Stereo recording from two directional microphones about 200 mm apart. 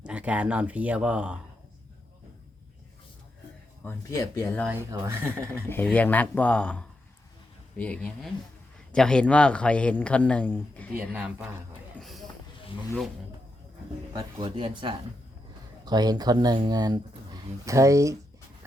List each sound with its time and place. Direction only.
0.0 s speech: 5° right (ahead or behind)
3.8 s speech: 15° left (ahead or behind)
4.9 s speech: 15° right (ahead or behind)
5.6 s speech: 10° left (ahead or behind)
10.9 s speech: 10° right (ahead or behind)
11.9 s a sound: centre (ahead or behind)
14.1 s speech: 20° right (ahead or behind)